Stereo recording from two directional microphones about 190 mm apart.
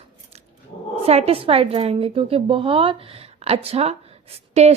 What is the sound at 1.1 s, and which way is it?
A woman's voice, 35° right (ahead or behind).